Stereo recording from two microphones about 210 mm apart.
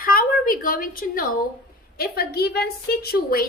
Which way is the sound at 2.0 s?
50° left (ahead or behind).